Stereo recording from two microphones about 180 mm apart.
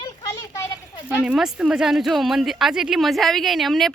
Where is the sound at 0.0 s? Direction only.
20° left (ahead or behind).